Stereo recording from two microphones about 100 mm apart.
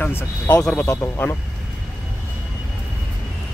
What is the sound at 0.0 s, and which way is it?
Speech, 20° left (ahead or behind).